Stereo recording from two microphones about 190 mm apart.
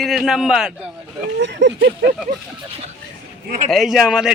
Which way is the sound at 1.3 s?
70° right (ahead or behind).